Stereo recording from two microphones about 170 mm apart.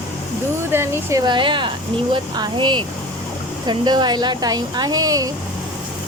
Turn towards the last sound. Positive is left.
turn(degrees=-20)  # may be behind; listen again after turning